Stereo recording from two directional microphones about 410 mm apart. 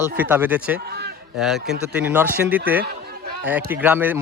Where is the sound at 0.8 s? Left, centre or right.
Right.